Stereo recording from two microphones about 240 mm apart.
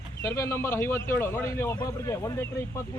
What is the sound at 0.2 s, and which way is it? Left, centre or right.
A man's voice, centre.